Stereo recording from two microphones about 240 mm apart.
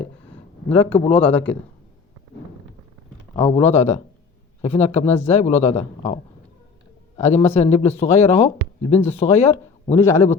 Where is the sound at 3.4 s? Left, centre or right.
Left.